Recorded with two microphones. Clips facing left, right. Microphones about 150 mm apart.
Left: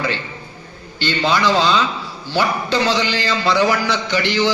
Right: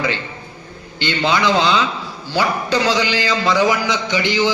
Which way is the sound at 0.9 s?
15° right (ahead or behind).